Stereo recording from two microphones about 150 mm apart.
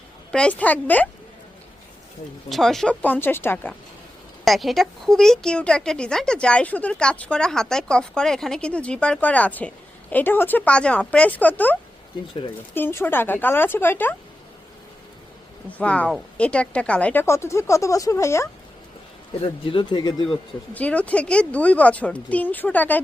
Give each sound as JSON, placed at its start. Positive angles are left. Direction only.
{"t": 0.3, "sound": "speech", "side_deg": 5}
{"t": 2.5, "sound": "speech", "side_deg": 0}
{"t": 4.4, "sound": "speech", "side_deg": 0}
{"t": 15.8, "sound": "speech", "side_deg": 10}
{"t": 19.4, "sound": "speech", "side_deg": 35}
{"t": 20.7, "sound": "speech", "side_deg": 10}